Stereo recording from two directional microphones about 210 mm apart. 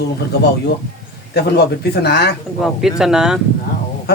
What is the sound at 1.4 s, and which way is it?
Speech, 50° left (ahead or behind).